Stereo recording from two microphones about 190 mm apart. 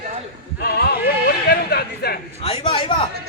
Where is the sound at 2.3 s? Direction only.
30° left (ahead or behind).